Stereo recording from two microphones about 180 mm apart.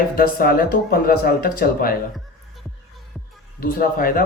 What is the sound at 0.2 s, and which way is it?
Speech, 55° left (ahead or behind).